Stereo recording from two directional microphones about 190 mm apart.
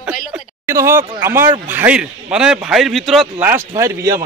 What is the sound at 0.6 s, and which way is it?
Speech, 15° right (ahead or behind).